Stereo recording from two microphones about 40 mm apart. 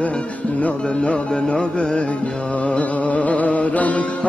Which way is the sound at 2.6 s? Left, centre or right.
Left.